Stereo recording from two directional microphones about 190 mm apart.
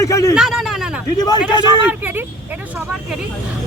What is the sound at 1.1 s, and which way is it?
Speech, 20° left (ahead or behind).